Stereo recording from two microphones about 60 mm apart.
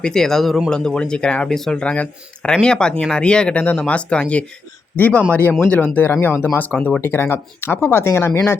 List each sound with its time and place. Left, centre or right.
0.0 s speech: centre
1.5 s speech: centre
1.8 s speech: left
6.2 s speech: left